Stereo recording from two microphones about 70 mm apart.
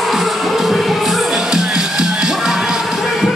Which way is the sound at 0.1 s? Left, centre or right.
Centre.